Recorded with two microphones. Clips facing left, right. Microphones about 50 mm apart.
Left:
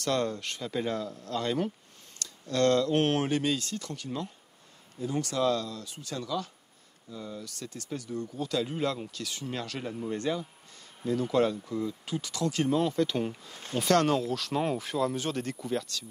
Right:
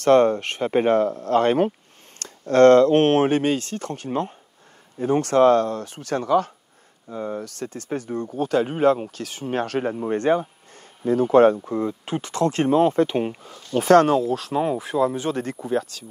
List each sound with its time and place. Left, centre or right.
0.0 s speech: right
14.5 s speech: centre
14.8 s speech: right